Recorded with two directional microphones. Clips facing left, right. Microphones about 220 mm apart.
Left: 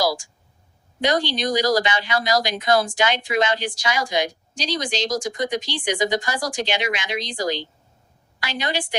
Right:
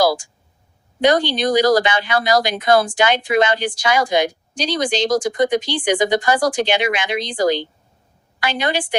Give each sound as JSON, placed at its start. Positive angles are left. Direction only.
{"t": 1.0, "sound": "speech", "side_deg": -55}